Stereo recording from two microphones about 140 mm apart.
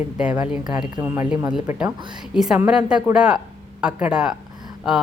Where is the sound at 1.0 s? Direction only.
20° right (ahead or behind).